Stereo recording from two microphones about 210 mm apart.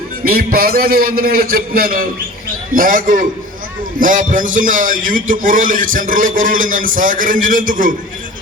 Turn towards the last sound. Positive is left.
turn(degrees=-40)  # may be behind; listen again after turning